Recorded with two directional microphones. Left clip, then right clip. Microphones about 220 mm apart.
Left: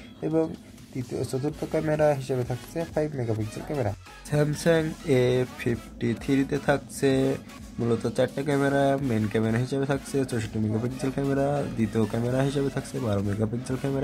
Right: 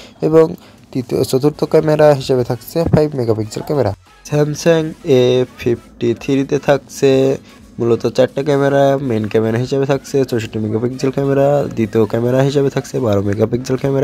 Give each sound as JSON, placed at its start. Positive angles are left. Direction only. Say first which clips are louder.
{"t": 0.2, "sound": "speech", "louder": "right 16 dB", "side_deg": -35}